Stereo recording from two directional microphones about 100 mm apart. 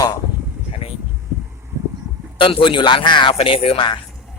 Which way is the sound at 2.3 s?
60° left (ahead or behind).